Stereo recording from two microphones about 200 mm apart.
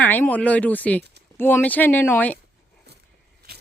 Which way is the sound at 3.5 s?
55° right (ahead or behind).